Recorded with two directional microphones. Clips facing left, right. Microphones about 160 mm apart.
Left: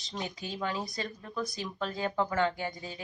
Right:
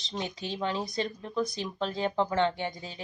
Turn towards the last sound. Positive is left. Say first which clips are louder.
# right 2 dB
turn(degrees=-25)  # may be behind; listen again after turning